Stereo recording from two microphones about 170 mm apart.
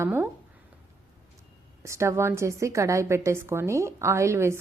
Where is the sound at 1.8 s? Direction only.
15° right (ahead or behind).